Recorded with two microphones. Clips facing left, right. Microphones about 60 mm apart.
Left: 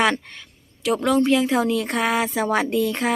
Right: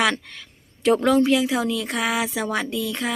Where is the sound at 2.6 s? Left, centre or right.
Left.